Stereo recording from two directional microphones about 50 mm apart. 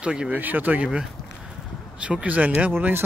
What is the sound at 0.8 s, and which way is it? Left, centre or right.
Speech, centre.